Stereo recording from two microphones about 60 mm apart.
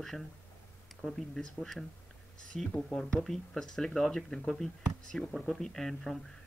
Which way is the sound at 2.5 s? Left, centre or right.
Centre.